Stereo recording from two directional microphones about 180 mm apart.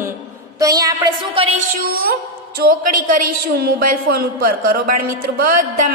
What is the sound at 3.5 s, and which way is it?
Speech, 55° right (ahead or behind).